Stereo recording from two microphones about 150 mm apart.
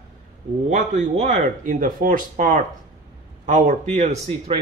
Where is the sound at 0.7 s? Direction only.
55° right (ahead or behind).